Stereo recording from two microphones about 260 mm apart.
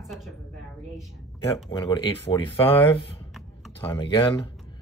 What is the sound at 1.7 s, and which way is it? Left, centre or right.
Speech, centre.